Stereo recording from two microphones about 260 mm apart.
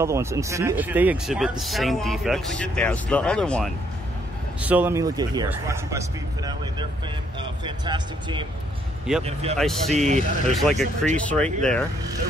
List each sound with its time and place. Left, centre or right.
0.0 s speech: centre
9.6 s speech: centre
9.9 s speech: right
10.6 s speech: centre